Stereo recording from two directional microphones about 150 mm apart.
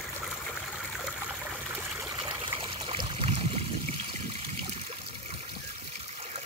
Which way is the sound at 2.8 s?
40° right (ahead or behind).